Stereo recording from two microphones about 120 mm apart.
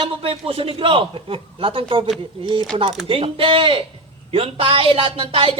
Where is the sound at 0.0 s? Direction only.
50° right (ahead or behind).